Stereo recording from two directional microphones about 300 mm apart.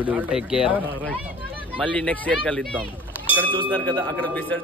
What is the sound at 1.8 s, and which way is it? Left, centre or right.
Speech, centre.